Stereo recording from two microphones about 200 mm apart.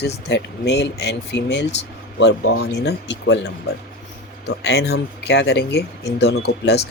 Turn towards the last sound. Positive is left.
turn(degrees=55)  # may be behind; listen again after turning